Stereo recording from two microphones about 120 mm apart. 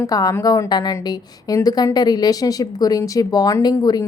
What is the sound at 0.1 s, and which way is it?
Speech, 30° left (ahead or behind).